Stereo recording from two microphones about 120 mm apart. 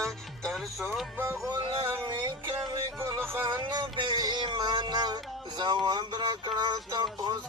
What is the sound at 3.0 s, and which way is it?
Music, 20° right (ahead or behind).